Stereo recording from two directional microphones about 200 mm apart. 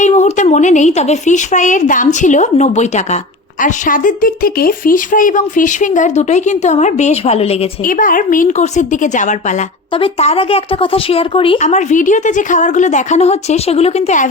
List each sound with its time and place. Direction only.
0.0 s a woman's voice: 35° left (ahead or behind)
7.9 s a woman's voice: 45° left (ahead or behind)